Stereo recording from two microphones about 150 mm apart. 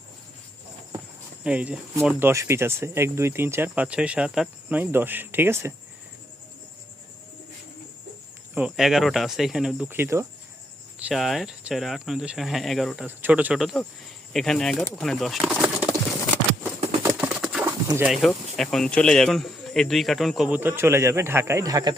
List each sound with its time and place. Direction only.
1.5 s speech: 10° right (ahead or behind)
8.5 s speech: 5° right (ahead or behind)
11.1 s speech: centre (ahead or behind)
13.1 s speech: 10° right (ahead or behind)
17.2 s patter: 5° right (ahead or behind)
17.7 s pigeon: 20° right (ahead or behind)
18.3 s speech: centre (ahead or behind)
20.6 s speech: 15° right (ahead or behind)